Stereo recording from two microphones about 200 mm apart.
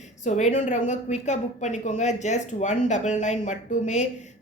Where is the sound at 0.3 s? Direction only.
35° left (ahead or behind).